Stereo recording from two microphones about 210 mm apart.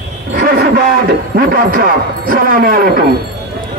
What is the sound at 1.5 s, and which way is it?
A man's voice, 45° right (ahead or behind).